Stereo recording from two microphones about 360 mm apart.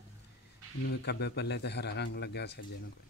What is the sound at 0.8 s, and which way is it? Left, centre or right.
A man's voice, left.